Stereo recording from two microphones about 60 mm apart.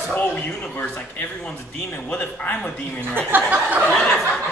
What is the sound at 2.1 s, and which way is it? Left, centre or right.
Speech, left.